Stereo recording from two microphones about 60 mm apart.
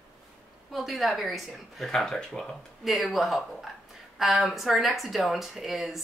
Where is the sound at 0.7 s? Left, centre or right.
Centre.